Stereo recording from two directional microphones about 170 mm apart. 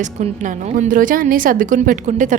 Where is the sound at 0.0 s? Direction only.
45° right (ahead or behind).